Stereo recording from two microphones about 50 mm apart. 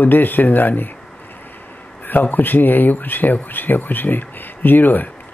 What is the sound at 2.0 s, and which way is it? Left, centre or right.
Speech, left.